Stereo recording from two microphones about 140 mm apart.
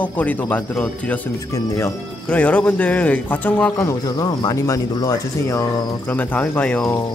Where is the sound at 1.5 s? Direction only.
20° left (ahead or behind).